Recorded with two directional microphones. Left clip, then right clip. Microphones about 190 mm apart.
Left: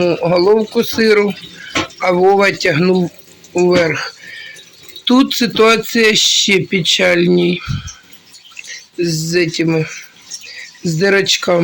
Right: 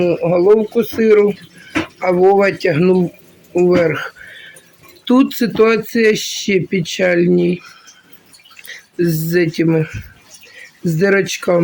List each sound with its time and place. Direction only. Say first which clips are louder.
0.0 s speech: left 1 dB; centre (ahead or behind)
9.0 s speech: even; 20° right (ahead or behind)